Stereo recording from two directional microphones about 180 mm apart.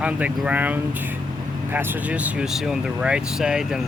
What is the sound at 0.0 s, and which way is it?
Speech, 10° right (ahead or behind).